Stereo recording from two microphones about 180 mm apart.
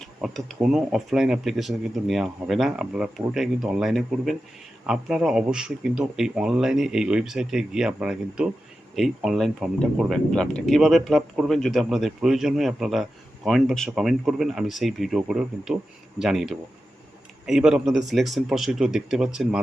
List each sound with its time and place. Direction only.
0.0 s speech: centre (ahead or behind)